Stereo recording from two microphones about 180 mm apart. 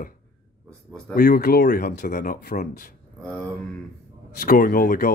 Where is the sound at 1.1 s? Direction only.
55° left (ahead or behind).